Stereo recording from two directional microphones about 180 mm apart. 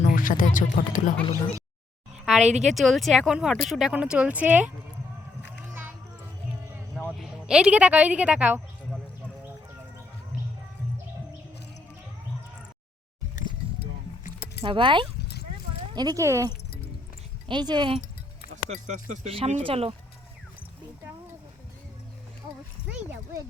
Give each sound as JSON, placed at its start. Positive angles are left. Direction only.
{"t": 0.0, "sound": "speech", "side_deg": 50}
{"t": 2.2, "sound": "speech", "side_deg": 0}
{"t": 6.7, "sound": "a sound", "side_deg": -5}
{"t": 14.6, "sound": "speech", "side_deg": -30}
{"t": 15.2, "sound": "a sound", "side_deg": 65}
{"t": 16.0, "sound": "speech", "side_deg": -20}
{"t": 18.9, "sound": "speech", "side_deg": -40}